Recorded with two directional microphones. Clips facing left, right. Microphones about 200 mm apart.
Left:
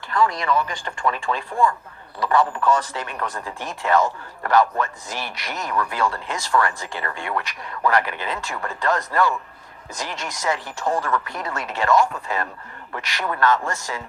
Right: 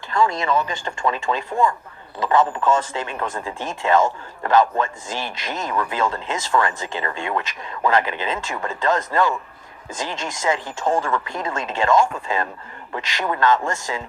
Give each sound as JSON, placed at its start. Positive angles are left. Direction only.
{"t": 0.1, "sound": "speech", "side_deg": -25}